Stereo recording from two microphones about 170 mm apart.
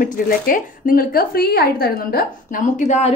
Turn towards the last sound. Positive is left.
turn(degrees=45)  # may be behind; listen again after turning